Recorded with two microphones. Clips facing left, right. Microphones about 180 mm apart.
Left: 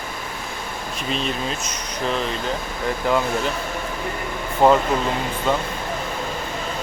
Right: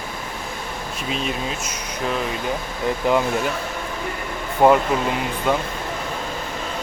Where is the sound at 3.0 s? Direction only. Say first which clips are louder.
Right 2 dB; 20° right (ahead or behind).